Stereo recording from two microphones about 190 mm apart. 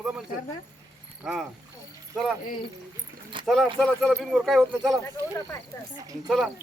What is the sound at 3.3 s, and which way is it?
Speech, 25° right (ahead or behind).